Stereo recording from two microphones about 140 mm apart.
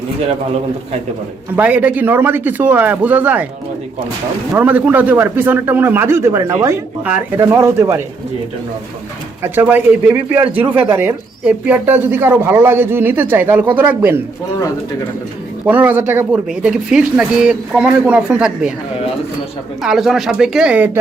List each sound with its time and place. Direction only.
1.5 s a man's voice: 10° right (ahead or behind)
4.5 s a man's voice: 10° right (ahead or behind)
9.4 s a man's voice: 15° right (ahead or behind)
15.6 s a man's voice: 10° right (ahead or behind)
19.8 s speech: centre (ahead or behind)